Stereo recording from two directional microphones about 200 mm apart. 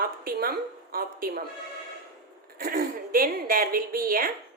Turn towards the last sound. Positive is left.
turn(degrees=-45)  # may be behind; listen again after turning